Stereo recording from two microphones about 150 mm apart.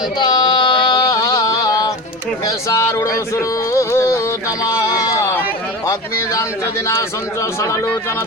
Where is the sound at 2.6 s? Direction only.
20° left (ahead or behind).